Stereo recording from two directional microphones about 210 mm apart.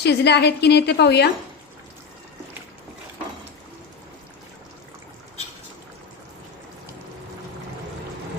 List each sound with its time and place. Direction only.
0.0 s a woman's voice: 50° left (ahead or behind)